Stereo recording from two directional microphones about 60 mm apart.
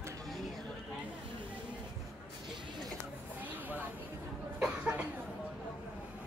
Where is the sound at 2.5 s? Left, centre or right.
Centre.